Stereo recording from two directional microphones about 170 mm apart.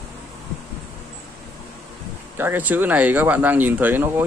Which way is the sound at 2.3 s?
10° right (ahead or behind).